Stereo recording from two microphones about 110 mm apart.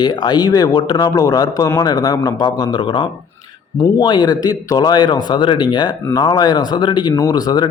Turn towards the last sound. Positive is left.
turn(degrees=35)  # may be behind; listen again after turning